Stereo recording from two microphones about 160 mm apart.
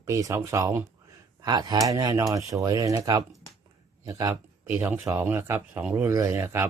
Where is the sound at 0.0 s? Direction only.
20° right (ahead or behind).